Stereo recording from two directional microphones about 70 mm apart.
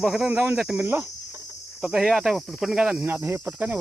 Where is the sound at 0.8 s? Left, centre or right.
Right.